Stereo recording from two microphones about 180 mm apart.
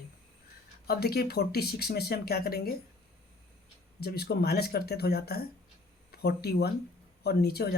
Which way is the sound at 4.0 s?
60° left (ahead or behind).